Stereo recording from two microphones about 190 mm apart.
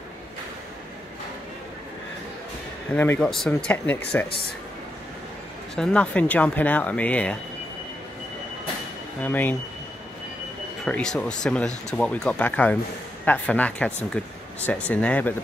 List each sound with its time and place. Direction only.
2.9 s speech: 10° left (ahead or behind)
5.8 s speech: 5° left (ahead or behind)
9.2 s speech: 10° left (ahead or behind)
10.9 s speech: 5° left (ahead or behind)